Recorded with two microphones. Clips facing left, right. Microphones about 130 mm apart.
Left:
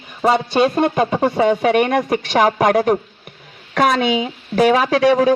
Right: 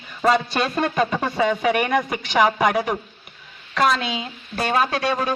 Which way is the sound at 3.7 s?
60° left (ahead or behind).